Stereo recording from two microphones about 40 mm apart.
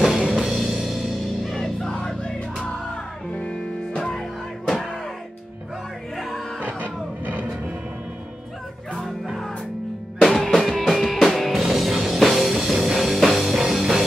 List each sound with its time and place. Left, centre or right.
0.0 s music: centre
3.3 s music: left
6.1 s music: centre
6.6 s music: right
10.2 s music: centre